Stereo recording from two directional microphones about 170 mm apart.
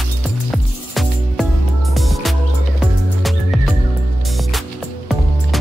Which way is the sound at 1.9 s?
Centre (ahead or behind).